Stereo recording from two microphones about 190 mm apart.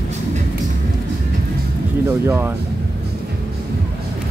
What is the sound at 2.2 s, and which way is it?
Speech, 10° right (ahead or behind).